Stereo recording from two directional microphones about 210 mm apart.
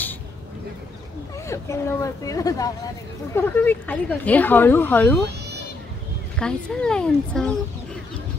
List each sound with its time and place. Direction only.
1.5 s speech: 15° left (ahead or behind)
6.3 s speech: 5° left (ahead or behind)